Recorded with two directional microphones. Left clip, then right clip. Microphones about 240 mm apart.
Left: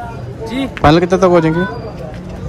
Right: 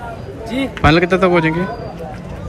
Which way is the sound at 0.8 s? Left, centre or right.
Centre.